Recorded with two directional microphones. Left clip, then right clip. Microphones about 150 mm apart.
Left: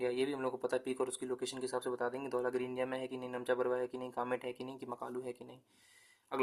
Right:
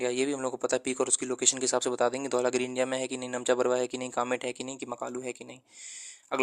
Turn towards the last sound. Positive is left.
turn(degrees=-50)  # may be behind; listen again after turning